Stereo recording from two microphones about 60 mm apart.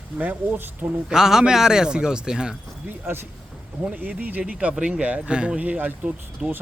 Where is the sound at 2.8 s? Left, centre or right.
Right.